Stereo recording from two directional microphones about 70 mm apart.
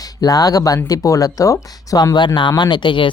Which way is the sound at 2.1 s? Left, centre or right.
Left.